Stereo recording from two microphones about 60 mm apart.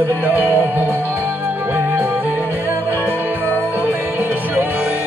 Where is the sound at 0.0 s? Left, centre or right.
Right.